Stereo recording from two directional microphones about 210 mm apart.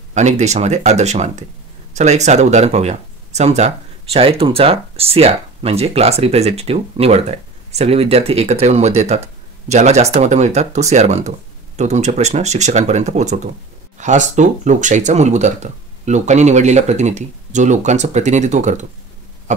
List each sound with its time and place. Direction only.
0.1 s speech: 35° right (ahead or behind)